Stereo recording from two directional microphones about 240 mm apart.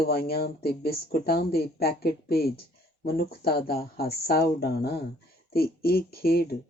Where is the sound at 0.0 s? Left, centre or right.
Left.